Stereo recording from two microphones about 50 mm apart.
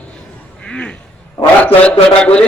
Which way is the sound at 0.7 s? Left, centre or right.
Left.